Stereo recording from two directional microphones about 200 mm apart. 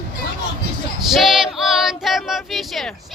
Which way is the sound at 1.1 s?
Centre (ahead or behind).